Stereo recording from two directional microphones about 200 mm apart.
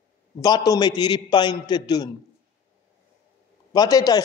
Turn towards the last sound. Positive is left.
turn(degrees=20)  # may be behind; listen again after turning